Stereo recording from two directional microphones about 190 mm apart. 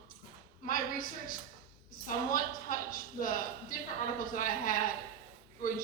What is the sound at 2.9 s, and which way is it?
A man's voice, 45° left (ahead or behind).